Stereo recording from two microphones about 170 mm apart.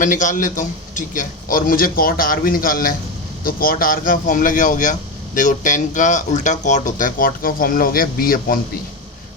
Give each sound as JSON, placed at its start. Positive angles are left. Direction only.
{"t": 0.0, "sound": "a man's voice", "side_deg": 50}